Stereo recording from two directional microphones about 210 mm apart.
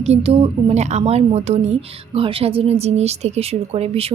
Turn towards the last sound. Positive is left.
turn(degrees=-30)  # may be behind; listen again after turning